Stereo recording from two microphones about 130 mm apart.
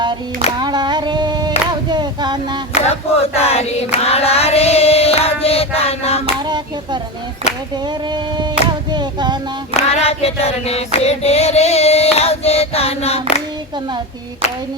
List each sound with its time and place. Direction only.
0.6 s a sound: 35° right (ahead or behind)
2.7 s choir: 55° left (ahead or behind)
3.9 s female singing: 50° left (ahead or behind)
6.4 s hands: 35° right (ahead or behind)
7.9 s a sound: 35° right (ahead or behind)
8.9 s child singing: 35° right (ahead or behind)
9.7 s child singing: 55° left (ahead or behind)